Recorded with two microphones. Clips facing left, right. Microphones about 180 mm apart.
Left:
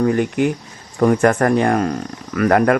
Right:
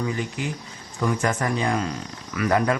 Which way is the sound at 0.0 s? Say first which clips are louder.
Left 11 dB; 60° left (ahead or behind).